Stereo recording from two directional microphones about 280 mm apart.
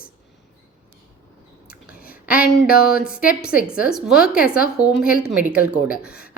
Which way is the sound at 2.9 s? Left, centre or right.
Centre.